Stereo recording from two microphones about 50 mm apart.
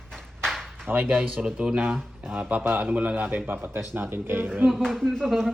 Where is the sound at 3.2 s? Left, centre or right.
Right.